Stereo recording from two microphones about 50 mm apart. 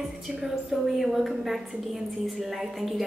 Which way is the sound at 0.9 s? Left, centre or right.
Centre.